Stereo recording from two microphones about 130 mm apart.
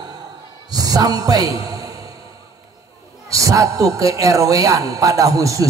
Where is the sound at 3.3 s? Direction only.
25° right (ahead or behind).